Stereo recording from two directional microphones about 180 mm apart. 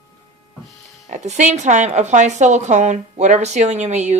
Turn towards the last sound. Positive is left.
turn(degrees=-40)  # may be behind; listen again after turning